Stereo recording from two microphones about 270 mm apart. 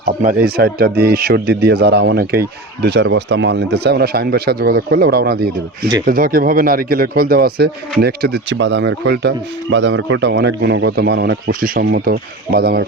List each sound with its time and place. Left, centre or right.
0.0 s speech: right